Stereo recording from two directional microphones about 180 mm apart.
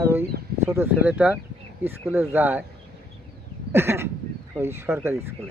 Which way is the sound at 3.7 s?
15° right (ahead or behind).